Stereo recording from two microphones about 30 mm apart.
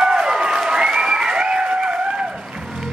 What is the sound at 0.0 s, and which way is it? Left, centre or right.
Crowd, centre.